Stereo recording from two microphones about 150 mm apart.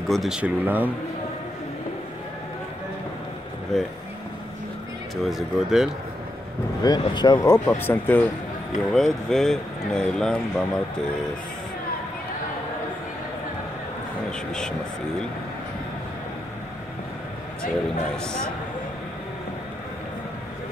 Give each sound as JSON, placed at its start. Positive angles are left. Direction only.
{"t": 0.1, "sound": "speech", "side_deg": 0}
{"t": 3.7, "sound": "speech", "side_deg": 0}
{"t": 5.1, "sound": "speech", "side_deg": 0}
{"t": 6.8, "sound": "speech", "side_deg": 25}
{"t": 18.1, "sound": "speech", "side_deg": 5}